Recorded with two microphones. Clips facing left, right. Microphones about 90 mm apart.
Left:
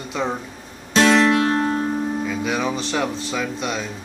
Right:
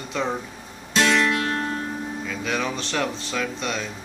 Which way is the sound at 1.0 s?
30° left (ahead or behind).